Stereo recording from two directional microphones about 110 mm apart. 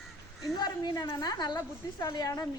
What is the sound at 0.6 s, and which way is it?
A woman's voice, 40° left (ahead or behind).